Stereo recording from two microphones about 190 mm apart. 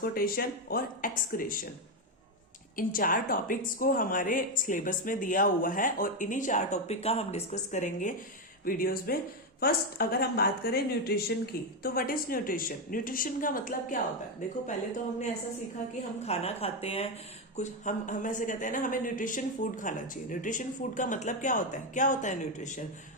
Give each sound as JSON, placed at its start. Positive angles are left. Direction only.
{"t": 0.0, "sound": "a woman's voice", "side_deg": 50}
{"t": 2.7, "sound": "a woman's voice", "side_deg": 45}
{"t": 16.2, "sound": "speech", "side_deg": 35}